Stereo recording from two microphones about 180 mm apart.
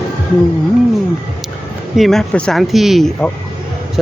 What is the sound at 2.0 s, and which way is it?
Speech, centre (ahead or behind).